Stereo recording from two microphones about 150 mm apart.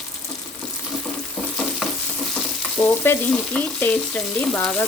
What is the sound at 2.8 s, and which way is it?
Stir, 30° left (ahead or behind).